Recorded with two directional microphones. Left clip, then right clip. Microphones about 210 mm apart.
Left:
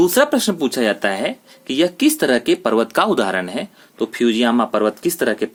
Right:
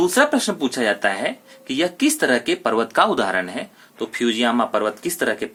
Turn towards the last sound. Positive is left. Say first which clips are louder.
# left 3 dB
turn(degrees=50)  # may be behind; listen again after turning